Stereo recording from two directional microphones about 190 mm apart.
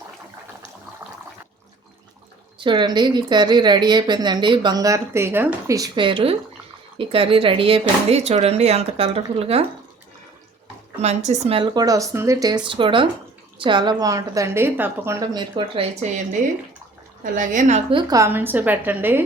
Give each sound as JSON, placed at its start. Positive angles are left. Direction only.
{"t": 2.6, "sound": "speech", "side_deg": -25}
{"t": 11.0, "sound": "speech", "side_deg": -35}
{"t": 17.3, "sound": "a woman's voice", "side_deg": -45}
{"t": 18.1, "sound": "a woman's voice", "side_deg": -15}